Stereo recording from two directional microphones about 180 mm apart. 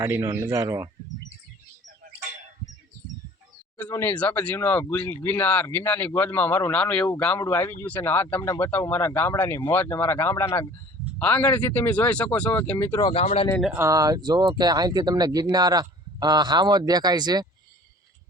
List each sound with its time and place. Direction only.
0.0 s speech: 20° right (ahead or behind)
3.8 s speech: 15° left (ahead or behind)
13.1 s speech: 35° left (ahead or behind)
13.7 s speech: 20° right (ahead or behind)